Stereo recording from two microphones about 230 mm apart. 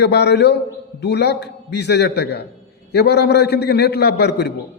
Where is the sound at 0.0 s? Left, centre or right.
Left.